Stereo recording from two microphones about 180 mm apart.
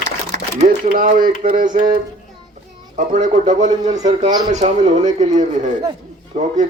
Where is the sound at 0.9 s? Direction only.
50° right (ahead or behind).